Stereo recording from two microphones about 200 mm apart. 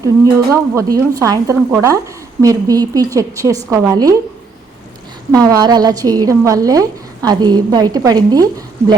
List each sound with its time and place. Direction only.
0.5 s speech: 15° right (ahead or behind)
5.3 s a woman's voice: 20° right (ahead or behind)